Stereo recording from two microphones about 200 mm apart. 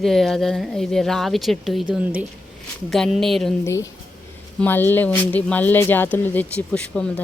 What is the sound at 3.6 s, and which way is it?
Speech, 15° left (ahead or behind).